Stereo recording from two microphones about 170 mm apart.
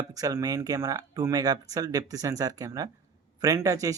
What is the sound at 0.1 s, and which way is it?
Speech, 20° right (ahead or behind).